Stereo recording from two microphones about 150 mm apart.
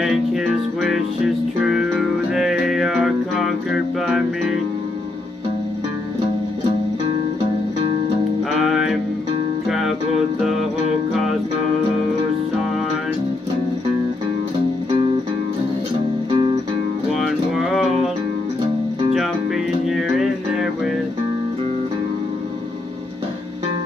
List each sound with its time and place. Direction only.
0.0 s music: 5° right (ahead or behind)
8.5 s music: centre (ahead or behind)
16.3 s music: 35° right (ahead or behind)
17.1 s music: centre (ahead or behind)
19.1 s music: centre (ahead or behind)